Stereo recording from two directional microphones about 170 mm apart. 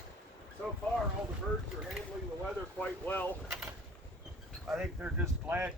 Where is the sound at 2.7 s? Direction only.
10° left (ahead or behind).